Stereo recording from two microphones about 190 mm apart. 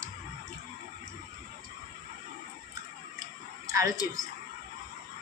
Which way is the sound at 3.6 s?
20° right (ahead or behind).